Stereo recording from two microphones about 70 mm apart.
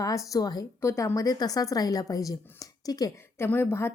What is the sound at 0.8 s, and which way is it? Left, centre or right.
Speech, left.